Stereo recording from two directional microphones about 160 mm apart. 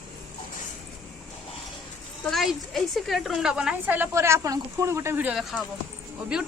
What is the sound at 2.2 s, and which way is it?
A woman's voice, centre (ahead or behind).